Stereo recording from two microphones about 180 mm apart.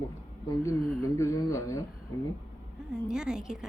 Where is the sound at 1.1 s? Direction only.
15° left (ahead or behind).